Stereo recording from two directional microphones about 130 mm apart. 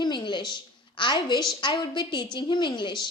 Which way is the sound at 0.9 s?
35° left (ahead or behind).